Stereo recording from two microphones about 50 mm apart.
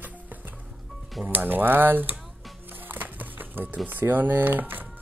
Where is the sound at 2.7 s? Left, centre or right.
Right.